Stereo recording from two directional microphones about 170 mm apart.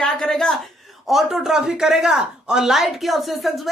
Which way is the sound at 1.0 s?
Centre (ahead or behind).